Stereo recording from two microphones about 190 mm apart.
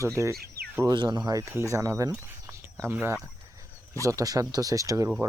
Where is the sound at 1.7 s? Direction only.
15° right (ahead or behind).